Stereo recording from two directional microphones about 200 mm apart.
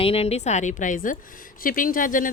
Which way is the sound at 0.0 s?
30° left (ahead or behind).